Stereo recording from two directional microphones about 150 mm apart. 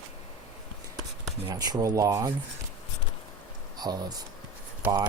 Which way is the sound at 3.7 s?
25° right (ahead or behind).